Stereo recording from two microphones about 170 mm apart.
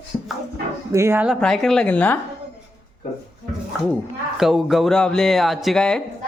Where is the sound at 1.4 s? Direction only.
5° left (ahead or behind).